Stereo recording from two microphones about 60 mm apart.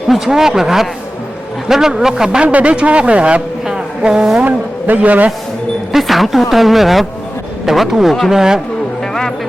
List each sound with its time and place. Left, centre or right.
0.1 s a man's voice: centre
3.7 s a sound: centre
4.4 s a man's voice: right
5.9 s speech: centre